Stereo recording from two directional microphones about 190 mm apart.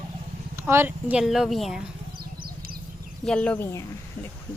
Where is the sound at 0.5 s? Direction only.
15° right (ahead or behind).